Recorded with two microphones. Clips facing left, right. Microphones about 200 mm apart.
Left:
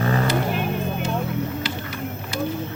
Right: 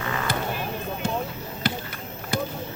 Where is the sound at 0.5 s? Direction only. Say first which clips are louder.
Left 5 dB; 65° left (ahead or behind).